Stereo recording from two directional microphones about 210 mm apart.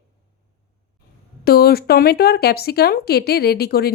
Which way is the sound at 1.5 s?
45° left (ahead or behind).